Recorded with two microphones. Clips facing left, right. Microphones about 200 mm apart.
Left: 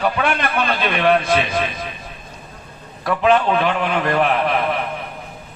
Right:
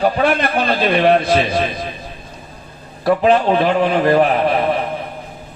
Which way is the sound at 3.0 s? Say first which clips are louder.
Right 3 dB; 35° right (ahead or behind).